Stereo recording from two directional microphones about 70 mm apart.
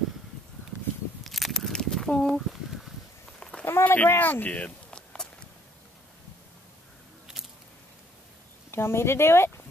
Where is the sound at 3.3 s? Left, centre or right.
Centre.